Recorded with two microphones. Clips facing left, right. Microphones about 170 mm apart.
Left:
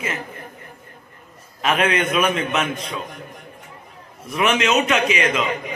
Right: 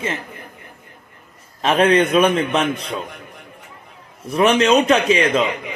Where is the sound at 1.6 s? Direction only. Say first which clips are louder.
Right 5 dB; 35° right (ahead or behind).